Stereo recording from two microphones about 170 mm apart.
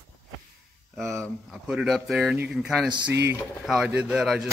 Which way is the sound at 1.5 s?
5° right (ahead or behind).